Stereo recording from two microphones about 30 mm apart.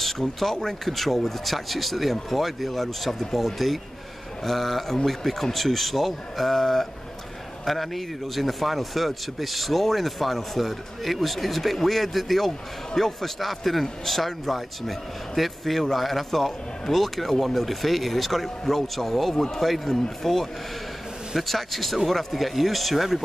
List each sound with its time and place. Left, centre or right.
0.0 s a man's voice: centre
19.3 s speech: centre
19.6 s a man's voice: centre